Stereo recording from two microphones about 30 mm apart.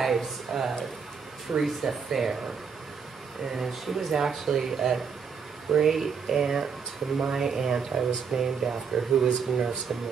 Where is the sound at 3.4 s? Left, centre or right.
Centre.